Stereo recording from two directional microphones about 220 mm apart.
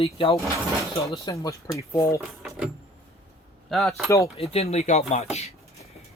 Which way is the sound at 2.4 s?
Centre (ahead or behind).